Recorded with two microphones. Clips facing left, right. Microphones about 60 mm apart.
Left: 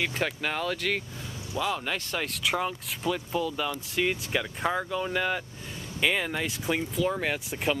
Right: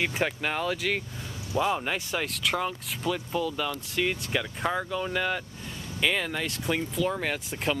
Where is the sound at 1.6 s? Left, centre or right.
Centre.